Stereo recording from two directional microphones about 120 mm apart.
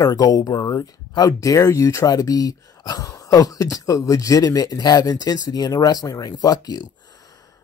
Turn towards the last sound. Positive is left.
turn(degrees=35)  # may be behind; listen again after turning